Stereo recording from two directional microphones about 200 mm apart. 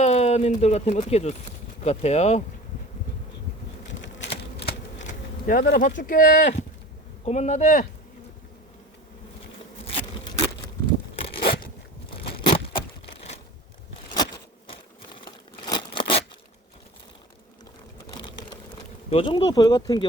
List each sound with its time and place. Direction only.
0.0 s speech: 30° left (ahead or behind)
3.8 s typewriter: 65° left (ahead or behind)
5.5 s speech: 45° left (ahead or behind)
9.8 s insect: 30° left (ahead or behind)
11.2 s a sound: 30° left (ahead or behind)
12.5 s a sound: 25° left (ahead or behind)
13.1 s crushing: 30° left (ahead or behind)
15.6 s a sound: 25° left (ahead or behind)
19.1 s speech: 25° left (ahead or behind)